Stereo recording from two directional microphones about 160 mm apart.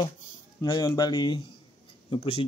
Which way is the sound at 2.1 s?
35° left (ahead or behind).